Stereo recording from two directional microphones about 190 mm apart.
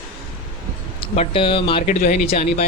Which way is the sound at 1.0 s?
30° left (ahead or behind).